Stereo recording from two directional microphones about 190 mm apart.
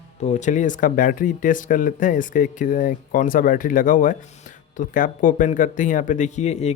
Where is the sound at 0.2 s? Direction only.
40° left (ahead or behind).